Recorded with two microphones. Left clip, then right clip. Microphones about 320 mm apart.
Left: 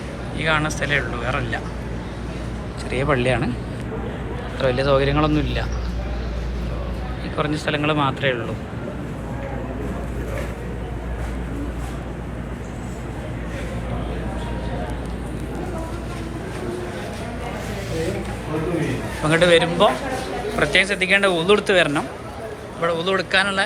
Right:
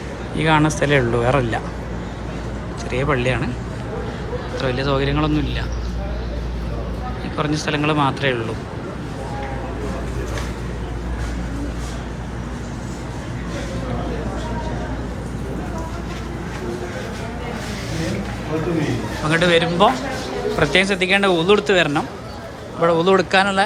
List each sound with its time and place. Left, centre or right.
0.3 s speech: centre
2.9 s speech: centre
4.8 s speech: centre
7.3 s speech: centre
19.2 s speech: centre